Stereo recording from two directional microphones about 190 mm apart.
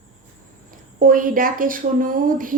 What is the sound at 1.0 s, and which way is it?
A woman's voice, 45° right (ahead or behind).